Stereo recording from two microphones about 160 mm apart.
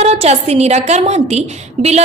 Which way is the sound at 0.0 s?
40° right (ahead or behind).